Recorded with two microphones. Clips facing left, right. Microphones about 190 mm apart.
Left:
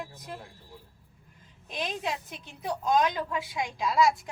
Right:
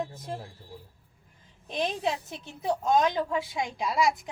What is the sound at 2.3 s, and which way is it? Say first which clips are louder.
A woman's voice: right 4 dB; 25° right (ahead or behind).